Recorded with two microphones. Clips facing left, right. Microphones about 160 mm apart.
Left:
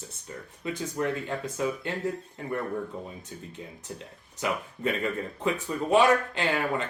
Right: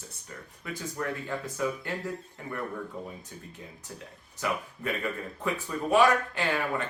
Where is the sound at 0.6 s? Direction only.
20° left (ahead or behind).